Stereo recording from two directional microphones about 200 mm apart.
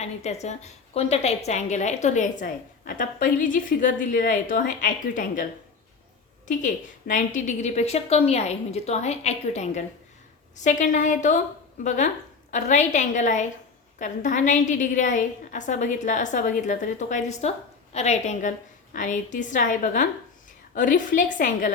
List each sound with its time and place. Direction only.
0.0 s a woman's voice: 35° left (ahead or behind)
6.5 s a woman's voice: 40° left (ahead or behind)